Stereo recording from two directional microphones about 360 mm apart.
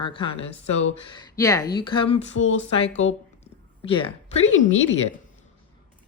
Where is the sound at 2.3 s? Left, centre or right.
Left.